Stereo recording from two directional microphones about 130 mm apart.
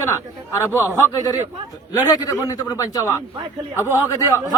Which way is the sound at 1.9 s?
25° left (ahead or behind).